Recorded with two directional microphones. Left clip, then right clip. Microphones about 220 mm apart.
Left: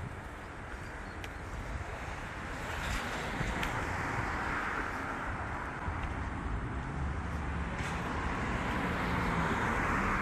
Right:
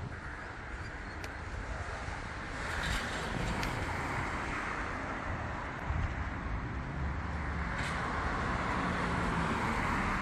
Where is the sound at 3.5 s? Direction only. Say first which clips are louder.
Left 1 dB; 45° right (ahead or behind).